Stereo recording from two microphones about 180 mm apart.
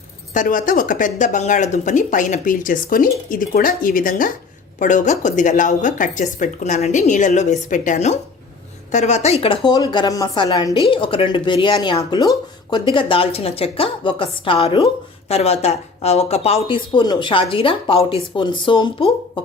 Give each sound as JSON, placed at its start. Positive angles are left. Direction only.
{"t": 0.3, "sound": "speech", "side_deg": 50}